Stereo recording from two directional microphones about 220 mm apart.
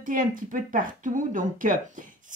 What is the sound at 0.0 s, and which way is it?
Speech, 40° right (ahead or behind).